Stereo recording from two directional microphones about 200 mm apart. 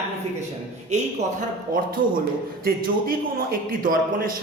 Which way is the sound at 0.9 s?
40° right (ahead or behind).